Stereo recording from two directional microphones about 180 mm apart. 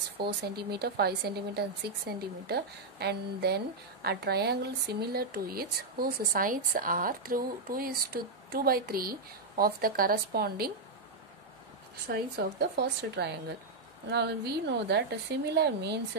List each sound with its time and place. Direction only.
0.2 s speech: 60° right (ahead or behind)
12.1 s speech: 60° right (ahead or behind)